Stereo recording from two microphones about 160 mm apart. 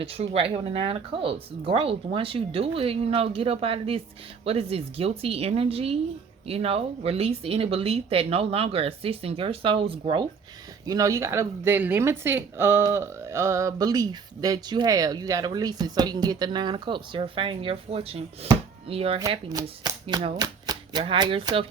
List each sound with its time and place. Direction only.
0.0 s speech: 35° right (ahead or behind)
10.8 s speech: 20° right (ahead or behind); by 19.2 s 35° right (ahead or behind)
19.3 s speech: 25° right (ahead or behind)